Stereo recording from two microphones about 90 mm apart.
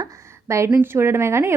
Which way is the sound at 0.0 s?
35° right (ahead or behind).